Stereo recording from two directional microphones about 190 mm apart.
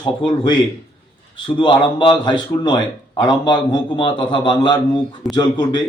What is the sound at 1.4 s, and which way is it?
A man's voice, 25° left (ahead or behind).